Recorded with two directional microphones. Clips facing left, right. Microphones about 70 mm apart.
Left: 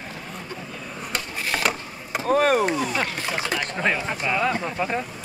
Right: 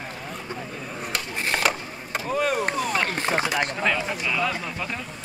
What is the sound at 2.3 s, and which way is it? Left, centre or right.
Speech, left.